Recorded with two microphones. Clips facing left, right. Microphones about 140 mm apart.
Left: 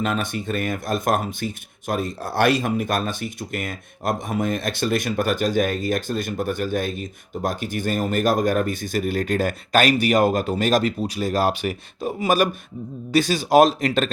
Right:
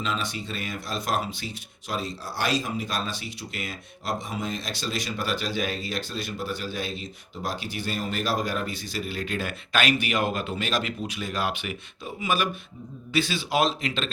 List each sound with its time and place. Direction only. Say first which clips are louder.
0.0 s speech: left 6 dB; 55° left (ahead or behind)